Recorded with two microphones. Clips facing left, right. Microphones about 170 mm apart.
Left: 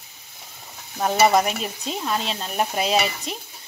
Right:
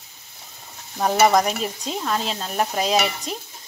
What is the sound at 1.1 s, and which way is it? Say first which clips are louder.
Stir: right 1 dB; 5° left (ahead or behind).